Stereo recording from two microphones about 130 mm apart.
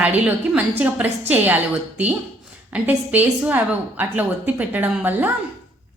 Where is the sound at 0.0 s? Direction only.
10° right (ahead or behind).